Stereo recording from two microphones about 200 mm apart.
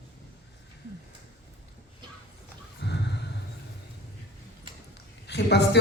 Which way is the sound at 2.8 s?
60° left (ahead or behind).